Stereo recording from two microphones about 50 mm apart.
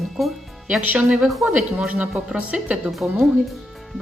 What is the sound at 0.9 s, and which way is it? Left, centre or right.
Speech, centre.